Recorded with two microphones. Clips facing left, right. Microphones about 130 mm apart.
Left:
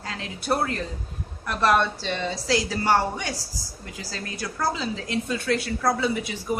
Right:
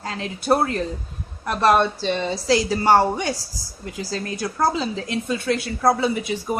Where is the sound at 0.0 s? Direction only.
30° right (ahead or behind).